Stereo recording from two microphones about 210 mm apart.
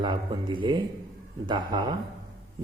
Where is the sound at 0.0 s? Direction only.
20° right (ahead or behind).